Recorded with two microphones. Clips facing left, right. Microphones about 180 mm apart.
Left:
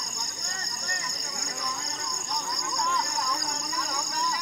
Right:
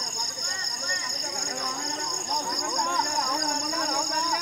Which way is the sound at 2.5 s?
50° right (ahead or behind).